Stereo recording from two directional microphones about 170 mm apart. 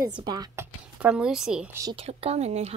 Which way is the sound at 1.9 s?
35° right (ahead or behind).